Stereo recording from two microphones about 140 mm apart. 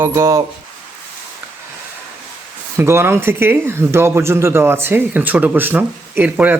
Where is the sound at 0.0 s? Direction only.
20° right (ahead or behind).